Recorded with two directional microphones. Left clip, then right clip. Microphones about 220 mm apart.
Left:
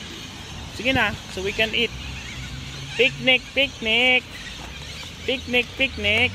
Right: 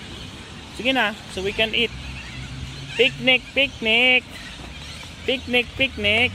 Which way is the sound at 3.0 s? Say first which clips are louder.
Right 1 dB; 20° right (ahead or behind).